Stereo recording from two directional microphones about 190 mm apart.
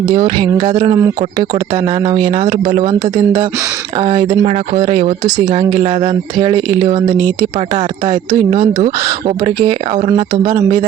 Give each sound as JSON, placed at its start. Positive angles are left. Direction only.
{"t": 0.1, "sound": "speech", "side_deg": -25}
{"t": 0.9, "sound": "speech", "side_deg": -20}
{"t": 7.8, "sound": "speech", "side_deg": -35}
{"t": 9.2, "sound": "speech", "side_deg": -20}